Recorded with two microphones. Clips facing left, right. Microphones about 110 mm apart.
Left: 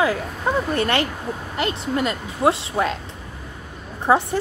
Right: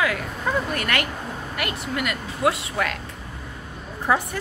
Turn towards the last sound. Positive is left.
turn(degrees=25)  # may be behind; listen again after turning